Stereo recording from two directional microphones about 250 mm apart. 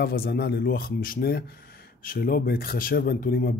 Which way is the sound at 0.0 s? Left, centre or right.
Left.